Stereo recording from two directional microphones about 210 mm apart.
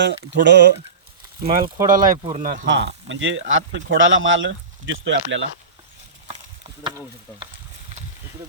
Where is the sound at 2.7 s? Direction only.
60° right (ahead or behind).